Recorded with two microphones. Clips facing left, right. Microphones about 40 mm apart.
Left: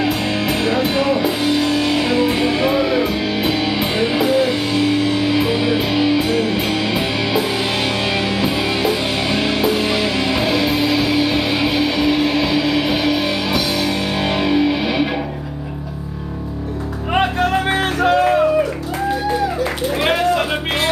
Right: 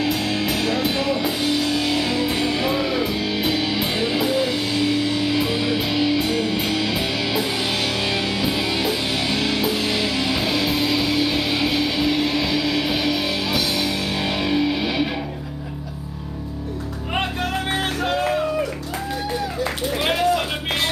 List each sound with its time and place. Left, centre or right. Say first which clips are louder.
0.0 s music: left 3 dB; centre
17.1 s music: left 8 dB; centre
19.6 s a sound: left 4 dB; centre